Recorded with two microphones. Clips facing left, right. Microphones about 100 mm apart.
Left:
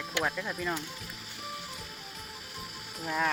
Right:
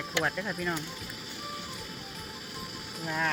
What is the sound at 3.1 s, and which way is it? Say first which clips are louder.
Speech: left 1 dB; centre (ahead or behind).